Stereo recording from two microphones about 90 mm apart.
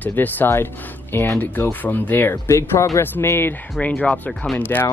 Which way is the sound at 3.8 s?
15° left (ahead or behind).